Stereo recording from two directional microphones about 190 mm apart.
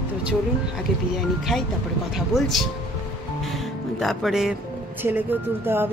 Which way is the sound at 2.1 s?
Centre (ahead or behind).